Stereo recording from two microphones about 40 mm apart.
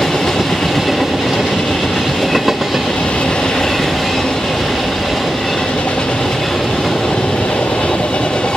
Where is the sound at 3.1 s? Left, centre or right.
Left; by 5.7 s centre.